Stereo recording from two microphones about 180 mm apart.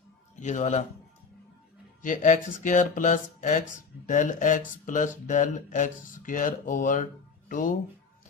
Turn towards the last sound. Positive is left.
turn(degrees=45)  # may be behind; listen again after turning